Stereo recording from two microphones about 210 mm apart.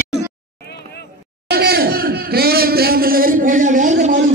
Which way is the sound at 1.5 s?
50° right (ahead or behind).